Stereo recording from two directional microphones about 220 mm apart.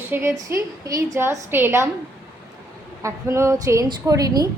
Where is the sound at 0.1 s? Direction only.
10° right (ahead or behind).